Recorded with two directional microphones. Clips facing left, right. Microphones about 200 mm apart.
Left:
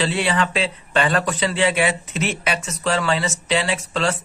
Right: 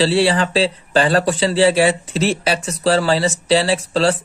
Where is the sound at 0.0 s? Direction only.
30° right (ahead or behind).